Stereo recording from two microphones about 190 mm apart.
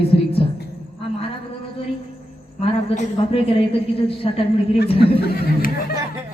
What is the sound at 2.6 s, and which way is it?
A woman's voice, 30° left (ahead or behind).